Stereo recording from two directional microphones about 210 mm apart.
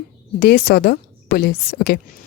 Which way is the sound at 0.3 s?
45° left (ahead or behind).